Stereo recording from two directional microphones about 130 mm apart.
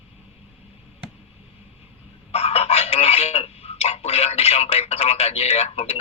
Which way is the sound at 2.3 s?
50° left (ahead or behind).